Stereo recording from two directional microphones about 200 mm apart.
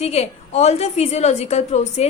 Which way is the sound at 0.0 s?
30° left (ahead or behind).